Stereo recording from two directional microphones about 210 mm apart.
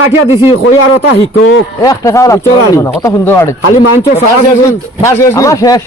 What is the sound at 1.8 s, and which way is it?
A man's voice, 15° left (ahead or behind).